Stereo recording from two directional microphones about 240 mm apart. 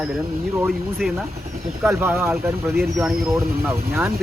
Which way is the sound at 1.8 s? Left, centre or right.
Centre.